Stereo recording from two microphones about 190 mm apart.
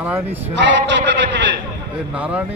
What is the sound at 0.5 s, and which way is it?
A man's voice, 70° right (ahead or behind).